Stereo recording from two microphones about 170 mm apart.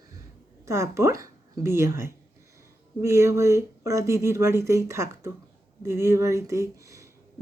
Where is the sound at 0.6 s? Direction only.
15° right (ahead or behind).